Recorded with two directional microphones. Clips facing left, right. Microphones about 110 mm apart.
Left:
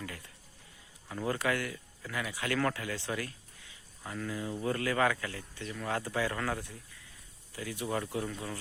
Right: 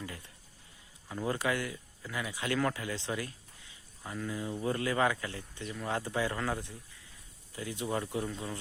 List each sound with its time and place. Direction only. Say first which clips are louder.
1.0 s speech: even; 20° right (ahead or behind)